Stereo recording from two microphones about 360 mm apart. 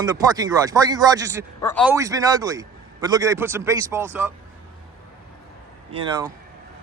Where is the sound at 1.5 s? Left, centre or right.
Centre.